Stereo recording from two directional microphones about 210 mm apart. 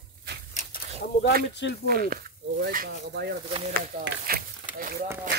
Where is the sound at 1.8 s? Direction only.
45° right (ahead or behind).